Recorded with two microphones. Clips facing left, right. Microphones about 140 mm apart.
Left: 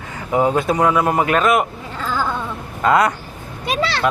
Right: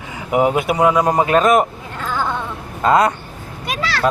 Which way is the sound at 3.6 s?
25° left (ahead or behind).